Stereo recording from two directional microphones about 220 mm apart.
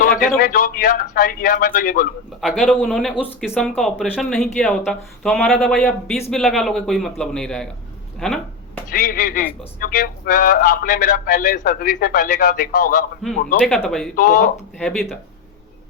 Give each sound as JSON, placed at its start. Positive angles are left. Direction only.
{"t": 0.0, "sound": "speech", "side_deg": 40}
{"t": 2.4, "sound": "speech", "side_deg": -5}
{"t": 8.2, "sound": "a sound", "side_deg": 5}
{"t": 8.9, "sound": "speech", "side_deg": 40}
{"t": 13.7, "sound": "speech", "side_deg": 0}
{"t": 14.2, "sound": "speech", "side_deg": 40}
{"t": 14.5, "sound": "speech", "side_deg": 5}